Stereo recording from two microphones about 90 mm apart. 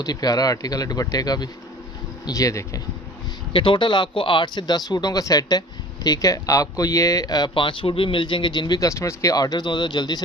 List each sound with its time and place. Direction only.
0.0 s speech: 45° left (ahead or behind)
3.5 s speech: 70° left (ahead or behind); by 7.5 s 50° left (ahead or behind)
7.5 s speech: 70° left (ahead or behind); by 8.9 s 50° left (ahead or behind)
8.9 s speech: 35° left (ahead or behind); by 10.2 s 50° left (ahead or behind)